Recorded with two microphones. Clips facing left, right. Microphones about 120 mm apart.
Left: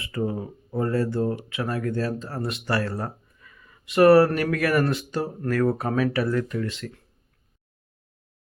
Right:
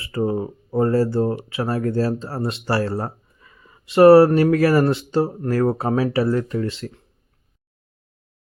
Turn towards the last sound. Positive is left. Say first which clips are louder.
# right 4 dB
turn(degrees=-30)  # may be behind; listen again after turning